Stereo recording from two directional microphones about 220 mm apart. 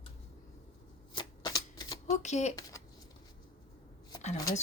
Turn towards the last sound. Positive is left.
turn(degrees=15)  # may be behind; listen again after turning